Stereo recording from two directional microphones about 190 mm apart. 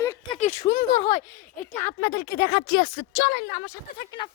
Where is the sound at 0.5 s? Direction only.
40° left (ahead or behind).